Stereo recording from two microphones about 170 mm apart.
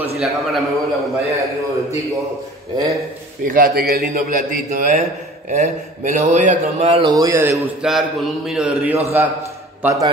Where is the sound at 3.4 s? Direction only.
55° right (ahead or behind); by 7.1 s 35° right (ahead or behind).